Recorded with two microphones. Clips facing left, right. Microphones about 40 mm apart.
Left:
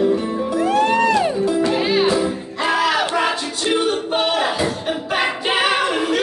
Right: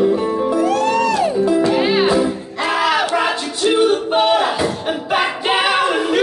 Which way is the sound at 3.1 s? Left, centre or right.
Centre.